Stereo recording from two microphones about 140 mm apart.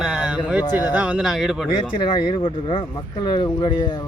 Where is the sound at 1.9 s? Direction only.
35° left (ahead or behind).